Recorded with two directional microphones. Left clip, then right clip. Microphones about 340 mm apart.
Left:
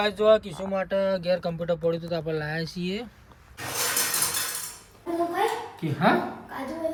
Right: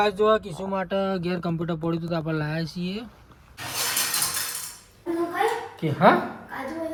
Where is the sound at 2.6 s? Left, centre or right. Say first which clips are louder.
Left 1 dB; centre.